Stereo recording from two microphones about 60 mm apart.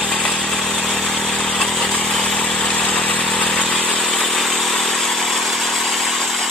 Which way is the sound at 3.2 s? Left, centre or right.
Centre.